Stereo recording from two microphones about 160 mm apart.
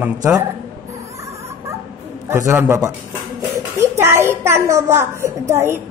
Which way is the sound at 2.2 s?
15° right (ahead or behind).